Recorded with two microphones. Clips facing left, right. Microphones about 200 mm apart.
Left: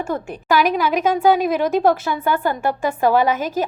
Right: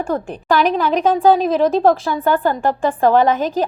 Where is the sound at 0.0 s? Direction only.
35° right (ahead or behind).